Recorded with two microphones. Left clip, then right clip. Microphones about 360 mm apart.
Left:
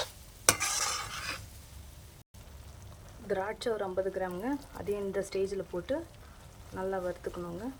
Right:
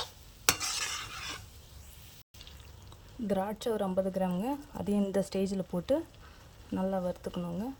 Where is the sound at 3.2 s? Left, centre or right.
Right.